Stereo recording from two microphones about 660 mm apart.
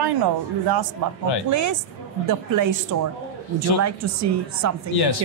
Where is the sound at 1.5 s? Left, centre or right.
Right.